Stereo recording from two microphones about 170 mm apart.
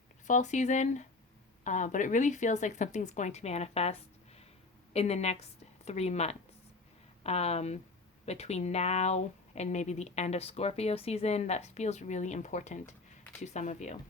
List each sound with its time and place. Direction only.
0.3 s speech: 45° left (ahead or behind)
4.9 s a woman's voice: 40° left (ahead or behind)